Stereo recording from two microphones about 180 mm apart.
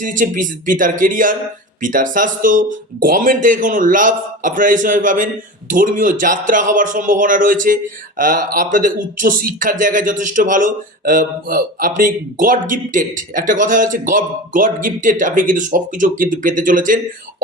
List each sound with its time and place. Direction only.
0.0 s speech: 45° right (ahead or behind)